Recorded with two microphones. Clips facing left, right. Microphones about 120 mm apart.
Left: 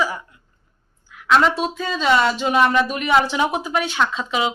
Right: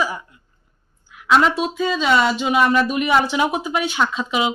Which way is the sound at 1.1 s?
15° right (ahead or behind).